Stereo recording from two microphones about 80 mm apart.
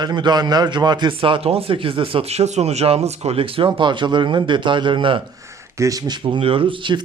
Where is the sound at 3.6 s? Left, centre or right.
Right.